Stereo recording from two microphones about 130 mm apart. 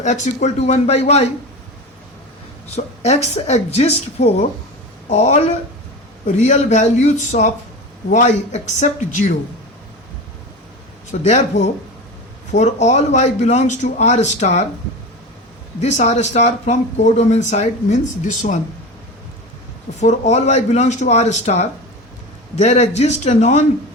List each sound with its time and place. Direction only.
0.0 s speech: 65° left (ahead or behind)
2.7 s speech: 55° left (ahead or behind)
11.1 s speech: 60° left (ahead or behind)
15.8 s speech: 60° left (ahead or behind)
20.0 s speech: 60° left (ahead or behind)